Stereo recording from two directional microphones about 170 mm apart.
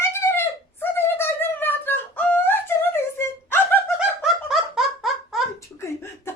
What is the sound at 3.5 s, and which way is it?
Laughter, 15° left (ahead or behind).